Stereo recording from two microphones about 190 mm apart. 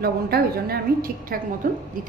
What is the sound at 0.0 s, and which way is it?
A woman's voice, 55° right (ahead or behind).